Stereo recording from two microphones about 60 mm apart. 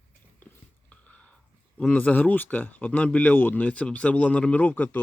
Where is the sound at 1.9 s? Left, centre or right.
Left.